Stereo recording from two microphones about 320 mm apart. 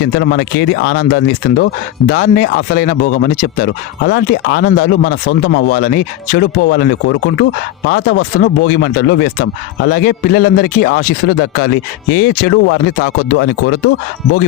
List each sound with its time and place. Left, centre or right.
0.0 s speech: left